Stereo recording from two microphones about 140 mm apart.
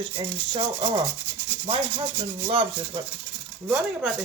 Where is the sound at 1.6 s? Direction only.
40° right (ahead or behind).